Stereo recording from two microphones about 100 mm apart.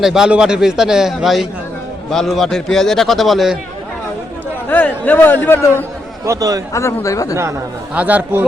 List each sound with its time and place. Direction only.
0.0 s a man's voice: 5° right (ahead or behind)
4.7 s a man's voice: 15° left (ahead or behind)
6.2 s a man's voice: 35° right (ahead or behind)
6.7 s speech: 30° left (ahead or behind)
7.9 s speech: 15° right (ahead or behind)